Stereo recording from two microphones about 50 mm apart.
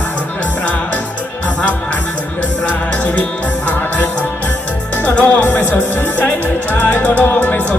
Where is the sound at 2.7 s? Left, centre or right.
Left.